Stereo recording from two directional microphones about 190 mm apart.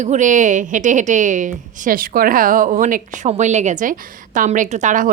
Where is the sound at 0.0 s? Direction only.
40° right (ahead or behind).